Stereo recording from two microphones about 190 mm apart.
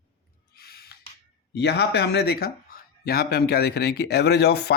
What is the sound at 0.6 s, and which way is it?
Gasp, 55° left (ahead or behind).